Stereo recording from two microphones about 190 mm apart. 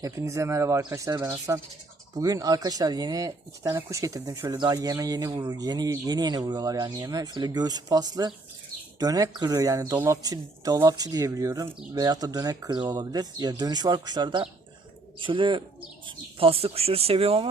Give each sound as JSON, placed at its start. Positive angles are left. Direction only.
{"t": 0.0, "sound": "speech", "side_deg": -15}